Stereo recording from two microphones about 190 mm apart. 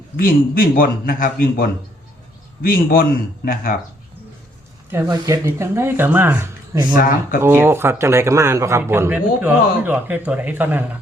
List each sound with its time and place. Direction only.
0.2 s speech: 50° left (ahead or behind)
4.9 s a man's voice: 15° right (ahead or behind)
6.9 s speech: 50° left (ahead or behind)
7.4 s a man's voice: 10° right (ahead or behind)